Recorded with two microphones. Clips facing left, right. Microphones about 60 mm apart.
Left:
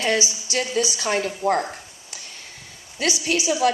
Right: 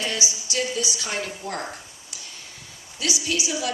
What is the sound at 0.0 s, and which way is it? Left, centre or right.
A woman's voice, left.